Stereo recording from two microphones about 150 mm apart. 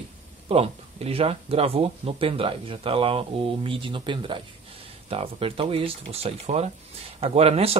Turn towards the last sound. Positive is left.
turn(degrees=-45)  # may be behind; listen again after turning